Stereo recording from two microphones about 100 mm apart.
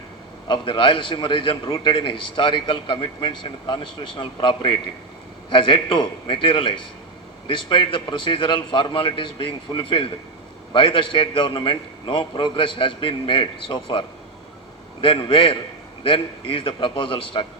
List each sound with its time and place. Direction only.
0.4 s a man's voice: 55° left (ahead or behind)
15.0 s a man's voice: 65° left (ahead or behind)